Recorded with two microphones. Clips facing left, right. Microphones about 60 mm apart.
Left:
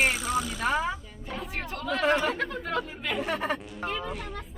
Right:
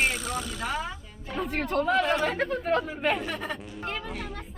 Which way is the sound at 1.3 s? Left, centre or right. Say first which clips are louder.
Right 8 dB; right.